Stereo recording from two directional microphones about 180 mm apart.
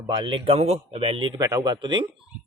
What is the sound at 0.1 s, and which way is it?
Speech, 30° right (ahead or behind).